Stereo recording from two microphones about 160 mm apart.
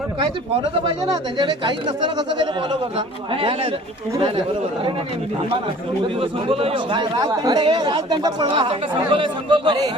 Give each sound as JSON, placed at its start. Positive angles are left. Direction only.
{"t": 0.2, "sound": "speech", "side_deg": -30}
{"t": 6.1, "sound": "speech", "side_deg": -35}